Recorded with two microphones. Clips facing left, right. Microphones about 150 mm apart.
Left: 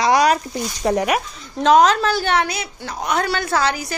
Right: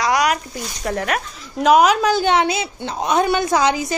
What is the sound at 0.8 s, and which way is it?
Speech, 15° left (ahead or behind).